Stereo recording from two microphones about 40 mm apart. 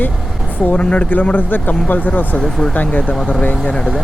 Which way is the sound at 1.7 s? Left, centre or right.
Left.